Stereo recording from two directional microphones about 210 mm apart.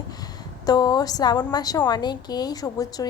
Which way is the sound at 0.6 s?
20° left (ahead or behind).